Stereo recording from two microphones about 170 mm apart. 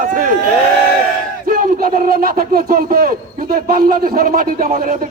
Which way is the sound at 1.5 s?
55° right (ahead or behind).